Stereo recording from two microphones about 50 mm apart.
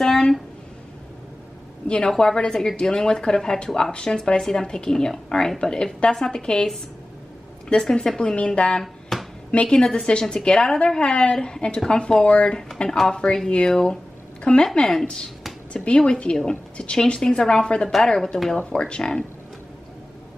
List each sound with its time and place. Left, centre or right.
0.0 s a sound: centre
2.0 s a woman's voice: centre
7.7 s a woman's voice: centre
9.1 s a sound: centre
9.5 s a woman's voice: centre
14.7 s a woman's voice: centre
15.7 s a woman's voice: left